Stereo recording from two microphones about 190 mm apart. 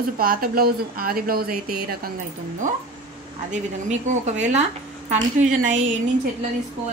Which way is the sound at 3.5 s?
40° right (ahead or behind).